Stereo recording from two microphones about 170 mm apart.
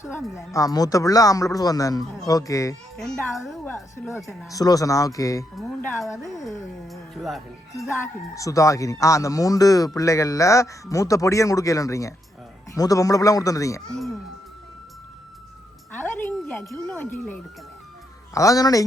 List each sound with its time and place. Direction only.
0.3 s speech: 20° left (ahead or behind)
3.0 s a child's voice: centre (ahead or behind)
3.9 s speech: 15° left (ahead or behind)
4.2 s a child's voice: centre (ahead or behind)
4.5 s speech: 20° left (ahead or behind)
6.2 s a child's voice: centre (ahead or behind)
7.8 s speech: 15° left (ahead or behind)
15.9 s a sound: 10° left (ahead or behind)
16.6 s speech: 10° left (ahead or behind)